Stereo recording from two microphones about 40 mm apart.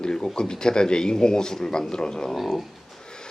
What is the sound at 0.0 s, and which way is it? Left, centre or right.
A man's voice, centre.